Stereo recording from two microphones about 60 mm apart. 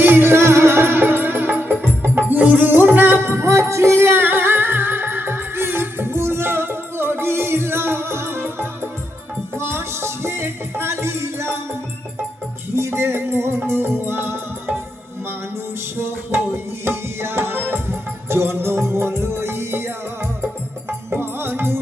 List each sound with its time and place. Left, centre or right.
0.0 s music: right
4.3 s music: right
16.0 s music: right
16.8 s tabla: right
21.1 s music: right